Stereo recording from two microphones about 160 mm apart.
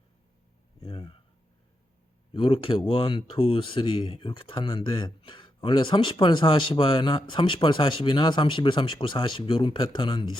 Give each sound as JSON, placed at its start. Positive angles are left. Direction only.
{"t": 0.8, "sound": "speech", "side_deg": 30}
{"t": 2.3, "sound": "speech", "side_deg": 35}